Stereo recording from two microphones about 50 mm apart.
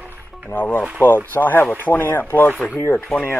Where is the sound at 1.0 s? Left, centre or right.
Left.